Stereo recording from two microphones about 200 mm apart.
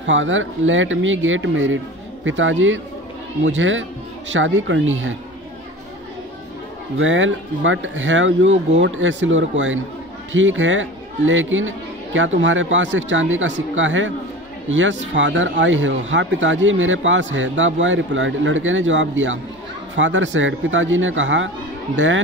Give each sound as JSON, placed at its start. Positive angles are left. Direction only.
{"t": 0.0, "sound": "speech", "side_deg": -70}
{"t": 7.0, "sound": "speech", "side_deg": -75}